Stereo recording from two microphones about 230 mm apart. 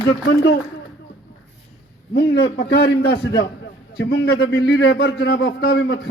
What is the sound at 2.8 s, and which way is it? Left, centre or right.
A man's voice, left.